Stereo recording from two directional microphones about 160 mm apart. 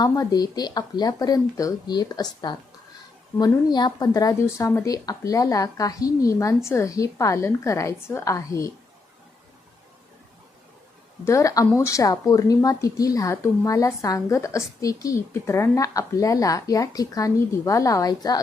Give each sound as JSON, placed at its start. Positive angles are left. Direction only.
{"t": 0.0, "sound": "a woman's voice", "side_deg": 25}
{"t": 11.3, "sound": "a woman's voice", "side_deg": 20}